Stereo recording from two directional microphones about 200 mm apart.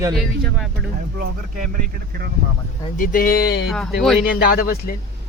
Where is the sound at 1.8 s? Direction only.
50° right (ahead or behind).